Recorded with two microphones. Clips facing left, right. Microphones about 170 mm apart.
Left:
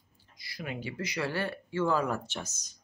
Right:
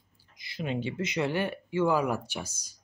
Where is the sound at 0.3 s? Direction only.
20° right (ahead or behind).